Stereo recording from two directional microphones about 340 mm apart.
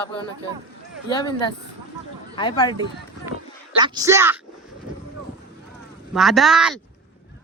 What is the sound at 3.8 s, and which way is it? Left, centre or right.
Speech, centre.